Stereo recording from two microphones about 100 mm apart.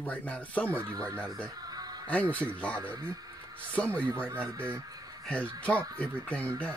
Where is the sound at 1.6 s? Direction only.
40° right (ahead or behind).